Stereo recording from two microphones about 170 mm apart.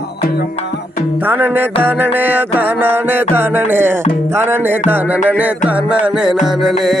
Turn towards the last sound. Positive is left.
turn(degrees=0)  # may be behind; listen again after turning